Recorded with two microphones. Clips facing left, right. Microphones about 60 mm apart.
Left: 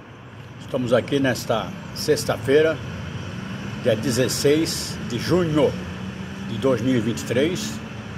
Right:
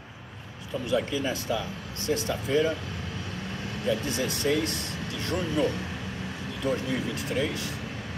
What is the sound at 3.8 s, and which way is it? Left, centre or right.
Speech, left.